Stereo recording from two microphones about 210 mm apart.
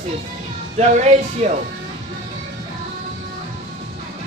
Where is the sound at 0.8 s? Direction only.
35° right (ahead or behind).